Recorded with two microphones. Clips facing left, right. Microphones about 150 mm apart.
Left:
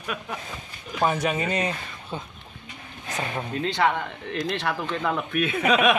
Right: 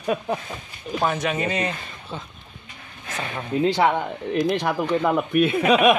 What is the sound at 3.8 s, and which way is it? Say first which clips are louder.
Speech: right 3 dB; 15° right (ahead or behind).